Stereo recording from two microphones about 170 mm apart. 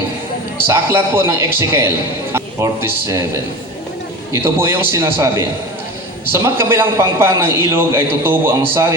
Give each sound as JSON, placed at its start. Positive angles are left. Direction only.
{"t": 0.7, "sound": "a man's voice", "side_deg": -15}
{"t": 4.3, "sound": "a man's voice", "side_deg": -15}